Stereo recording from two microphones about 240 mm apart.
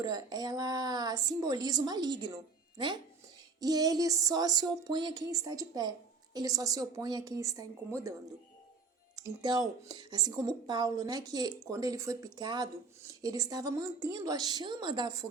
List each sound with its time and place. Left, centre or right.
0.0 s speech: centre
9.1 s speech: centre